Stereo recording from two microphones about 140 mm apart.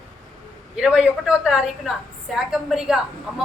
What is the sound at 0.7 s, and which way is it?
A woman's voice, 5° right (ahead or behind).